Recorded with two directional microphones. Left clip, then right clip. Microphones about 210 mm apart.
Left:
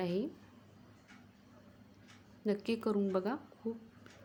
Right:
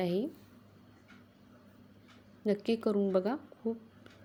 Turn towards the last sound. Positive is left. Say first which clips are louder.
# right 4 dB
turn(degrees=-10)  # may be behind; listen again after turning